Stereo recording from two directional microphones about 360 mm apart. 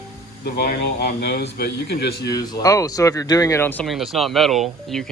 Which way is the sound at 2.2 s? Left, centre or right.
Centre.